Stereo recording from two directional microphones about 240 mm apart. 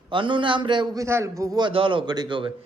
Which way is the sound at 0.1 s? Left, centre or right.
Right.